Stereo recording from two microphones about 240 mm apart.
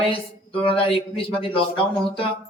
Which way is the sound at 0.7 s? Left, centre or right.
Left.